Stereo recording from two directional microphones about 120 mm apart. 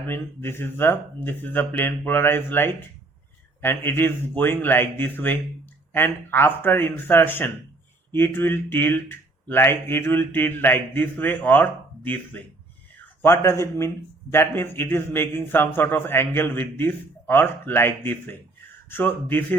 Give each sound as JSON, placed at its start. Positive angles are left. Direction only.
{"t": 0.1, "sound": "a man's voice", "side_deg": 20}